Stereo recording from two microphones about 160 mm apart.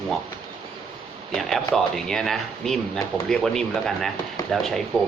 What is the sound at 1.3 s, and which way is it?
Speech, centre (ahead or behind).